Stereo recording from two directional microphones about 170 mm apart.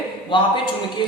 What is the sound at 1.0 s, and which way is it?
Music, 25° left (ahead or behind).